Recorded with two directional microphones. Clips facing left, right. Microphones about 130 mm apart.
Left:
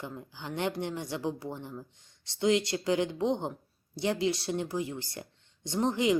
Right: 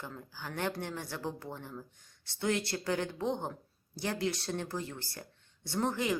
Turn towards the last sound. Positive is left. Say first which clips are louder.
# left 5 dB
turn(degrees=20)  # may be behind; listen again after turning